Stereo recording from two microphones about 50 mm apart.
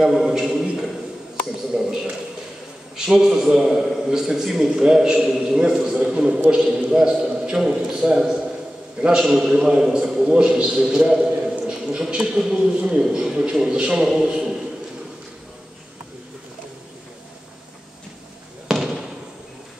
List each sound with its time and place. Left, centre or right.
0.0 s a man's voice: centre
1.7 s a man's voice: centre
3.1 s a man's voice: centre
9.3 s a man's voice: centre
12.4 s a man's voice: centre
18.7 s basketball bounce: centre